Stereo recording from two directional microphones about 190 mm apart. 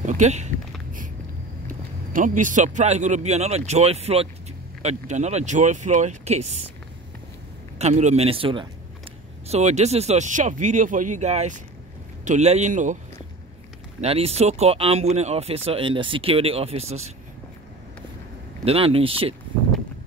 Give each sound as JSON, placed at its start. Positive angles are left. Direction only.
{"t": 0.0, "sound": "a sound", "side_deg": -40}
{"t": 2.1, "sound": "speech", "side_deg": -45}
{"t": 7.8, "sound": "speech", "side_deg": -35}
{"t": 14.0, "sound": "speech", "side_deg": -30}
{"t": 18.6, "sound": "speech", "side_deg": -30}